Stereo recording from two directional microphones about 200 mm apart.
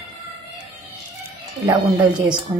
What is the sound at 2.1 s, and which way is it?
Speech, 20° right (ahead or behind).